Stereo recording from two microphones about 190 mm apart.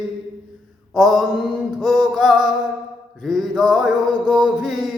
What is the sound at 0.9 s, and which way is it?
Mantra, centre (ahead or behind).